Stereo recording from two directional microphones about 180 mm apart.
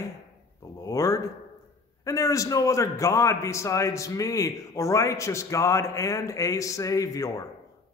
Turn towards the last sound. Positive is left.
turn(degrees=20)  # may be behind; listen again after turning